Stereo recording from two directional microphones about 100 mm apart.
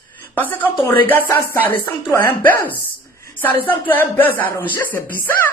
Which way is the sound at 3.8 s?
20° left (ahead or behind).